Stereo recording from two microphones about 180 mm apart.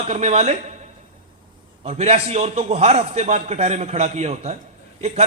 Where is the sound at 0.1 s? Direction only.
35° right (ahead or behind).